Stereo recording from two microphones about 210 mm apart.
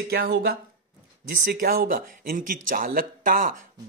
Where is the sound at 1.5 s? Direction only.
45° right (ahead or behind).